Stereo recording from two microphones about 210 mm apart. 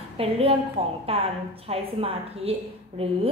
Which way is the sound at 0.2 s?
25° right (ahead or behind).